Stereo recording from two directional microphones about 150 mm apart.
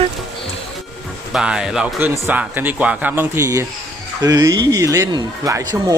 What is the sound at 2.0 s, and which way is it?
Speech, 15° right (ahead or behind).